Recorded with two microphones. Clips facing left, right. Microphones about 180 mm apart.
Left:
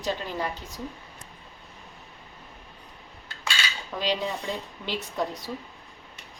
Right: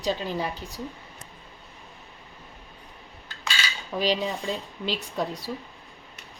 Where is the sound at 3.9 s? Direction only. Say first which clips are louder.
Right 5 dB; 20° right (ahead or behind).